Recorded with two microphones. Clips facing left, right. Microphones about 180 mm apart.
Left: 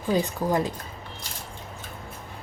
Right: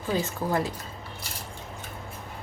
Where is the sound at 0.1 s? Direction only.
15° left (ahead or behind).